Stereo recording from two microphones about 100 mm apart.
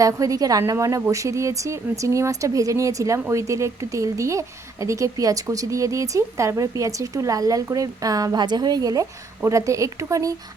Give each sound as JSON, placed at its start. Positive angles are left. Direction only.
{"t": 0.0, "sound": "speech", "side_deg": -35}